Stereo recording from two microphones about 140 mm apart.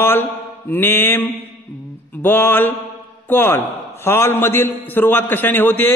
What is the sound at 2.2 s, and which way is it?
A man's voice, 15° left (ahead or behind).